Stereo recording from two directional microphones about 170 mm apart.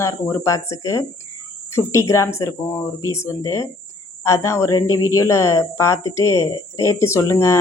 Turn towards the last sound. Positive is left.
turn(degrees=15)  # may be behind; listen again after turning